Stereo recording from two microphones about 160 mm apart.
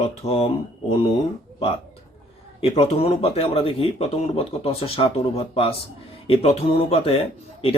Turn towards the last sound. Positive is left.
turn(degrees=35)  # may be behind; listen again after turning